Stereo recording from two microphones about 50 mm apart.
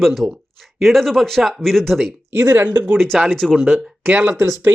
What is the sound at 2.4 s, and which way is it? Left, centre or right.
Speech, right.